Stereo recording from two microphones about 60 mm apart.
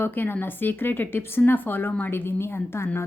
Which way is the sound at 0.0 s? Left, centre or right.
Left.